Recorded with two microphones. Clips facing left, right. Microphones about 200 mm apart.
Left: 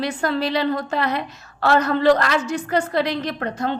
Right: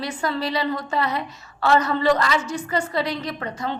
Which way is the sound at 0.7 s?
55° left (ahead or behind).